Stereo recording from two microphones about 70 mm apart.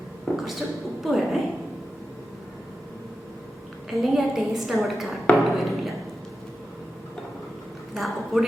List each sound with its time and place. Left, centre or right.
0.3 s a sound: left
1.0 s a woman's voice: centre
3.8 s a woman's voice: centre
7.9 s a woman's voice: centre